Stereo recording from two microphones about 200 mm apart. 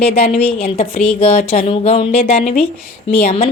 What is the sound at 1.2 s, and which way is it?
Speech, 30° left (ahead or behind).